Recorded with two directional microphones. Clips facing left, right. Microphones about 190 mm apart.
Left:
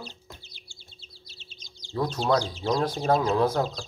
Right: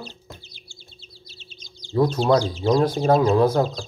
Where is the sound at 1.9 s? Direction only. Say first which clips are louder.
Right 6 dB; 15° right (ahead or behind).